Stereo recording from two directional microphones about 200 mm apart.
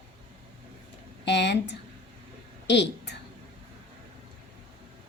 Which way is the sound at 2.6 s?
60° left (ahead or behind).